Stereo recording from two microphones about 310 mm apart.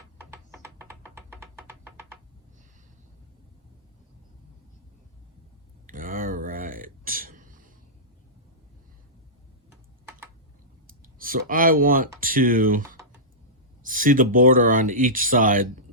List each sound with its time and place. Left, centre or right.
0.2 s music: centre
5.8 s a sound: right
11.0 s speech: right